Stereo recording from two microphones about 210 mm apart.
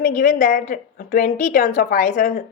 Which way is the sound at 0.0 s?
40° left (ahead or behind).